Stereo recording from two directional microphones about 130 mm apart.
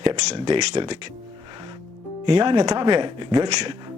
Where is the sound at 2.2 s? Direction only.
40° right (ahead or behind).